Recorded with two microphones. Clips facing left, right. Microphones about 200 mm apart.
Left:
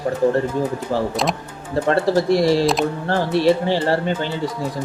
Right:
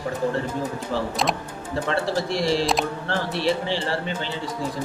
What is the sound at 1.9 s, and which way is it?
Speech, 45° left (ahead or behind).